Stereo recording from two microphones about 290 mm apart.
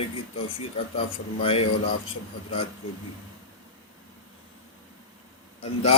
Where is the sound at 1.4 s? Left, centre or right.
Centre.